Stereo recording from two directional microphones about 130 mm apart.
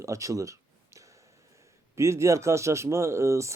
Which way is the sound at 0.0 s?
25° right (ahead or behind).